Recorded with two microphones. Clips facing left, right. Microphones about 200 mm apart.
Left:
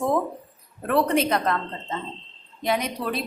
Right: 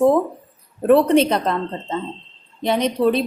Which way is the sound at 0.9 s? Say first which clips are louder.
Right 8 dB; 30° right (ahead or behind).